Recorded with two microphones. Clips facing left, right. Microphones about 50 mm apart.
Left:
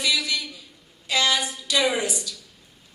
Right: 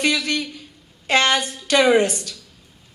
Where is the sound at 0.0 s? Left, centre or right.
Right.